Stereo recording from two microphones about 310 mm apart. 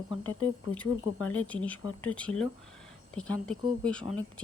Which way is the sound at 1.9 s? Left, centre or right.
Left.